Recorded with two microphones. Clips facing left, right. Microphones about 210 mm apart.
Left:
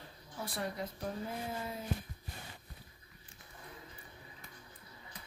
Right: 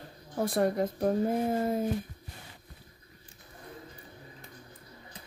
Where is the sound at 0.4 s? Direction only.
50° right (ahead or behind).